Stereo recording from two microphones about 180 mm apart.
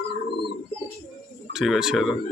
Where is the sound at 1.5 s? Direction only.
Centre (ahead or behind).